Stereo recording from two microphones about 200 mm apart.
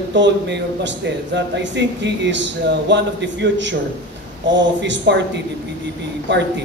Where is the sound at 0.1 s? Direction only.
60° right (ahead or behind).